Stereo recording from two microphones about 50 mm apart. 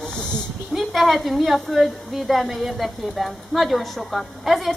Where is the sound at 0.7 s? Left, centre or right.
Centre.